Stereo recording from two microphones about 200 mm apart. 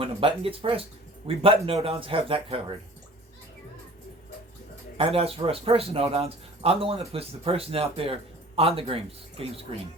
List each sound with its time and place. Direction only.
0.0 s speech: 25° right (ahead or behind)
4.9 s speech: 30° right (ahead or behind)